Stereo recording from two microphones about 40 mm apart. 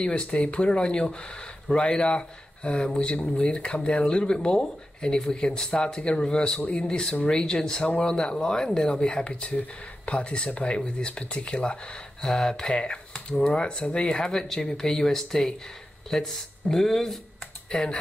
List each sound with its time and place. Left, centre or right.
0.0 s speech: left
12.2 s speech: centre